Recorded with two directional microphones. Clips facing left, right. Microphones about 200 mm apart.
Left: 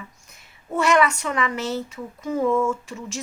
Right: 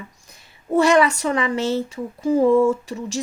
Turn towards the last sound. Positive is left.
turn(degrees=-35)  # may be behind; listen again after turning